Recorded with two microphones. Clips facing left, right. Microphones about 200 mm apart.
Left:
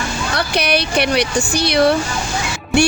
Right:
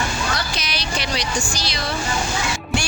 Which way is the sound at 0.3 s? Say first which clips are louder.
Left 10 dB; 60° left (ahead or behind).